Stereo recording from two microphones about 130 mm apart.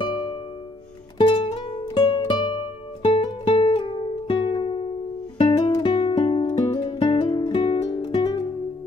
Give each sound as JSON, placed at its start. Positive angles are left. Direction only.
{"t": 0.0, "sound": "music", "side_deg": 40}